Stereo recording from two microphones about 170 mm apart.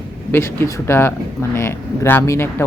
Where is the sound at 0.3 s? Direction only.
15° left (ahead or behind).